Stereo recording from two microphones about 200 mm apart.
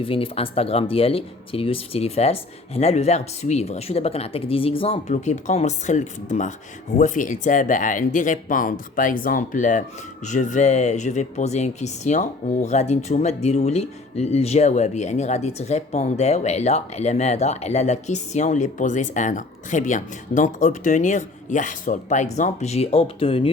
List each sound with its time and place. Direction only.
0.0 s speech: 25° left (ahead or behind)